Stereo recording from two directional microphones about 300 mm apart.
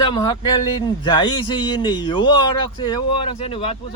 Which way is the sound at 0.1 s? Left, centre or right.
Centre.